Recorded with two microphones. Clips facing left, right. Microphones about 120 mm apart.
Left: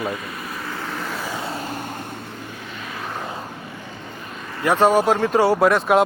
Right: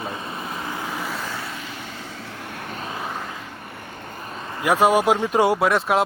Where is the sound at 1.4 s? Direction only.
40° left (ahead or behind).